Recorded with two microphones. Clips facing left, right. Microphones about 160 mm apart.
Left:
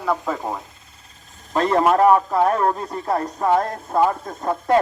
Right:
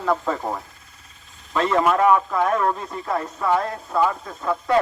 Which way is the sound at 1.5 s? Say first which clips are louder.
Left 2 dB; 40° left (ahead or behind).